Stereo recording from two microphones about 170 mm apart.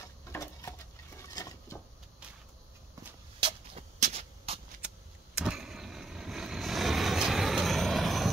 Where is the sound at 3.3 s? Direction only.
30° right (ahead or behind).